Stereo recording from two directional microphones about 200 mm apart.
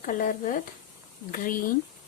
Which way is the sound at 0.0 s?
40° left (ahead or behind).